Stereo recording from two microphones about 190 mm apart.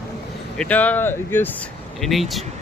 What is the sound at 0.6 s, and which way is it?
Speech, 10° left (ahead or behind).